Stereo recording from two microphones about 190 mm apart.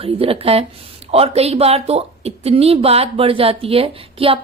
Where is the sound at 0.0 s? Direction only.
30° right (ahead or behind).